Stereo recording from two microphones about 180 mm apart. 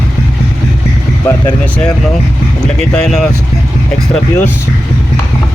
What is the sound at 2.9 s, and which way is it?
Speech, 5° left (ahead or behind).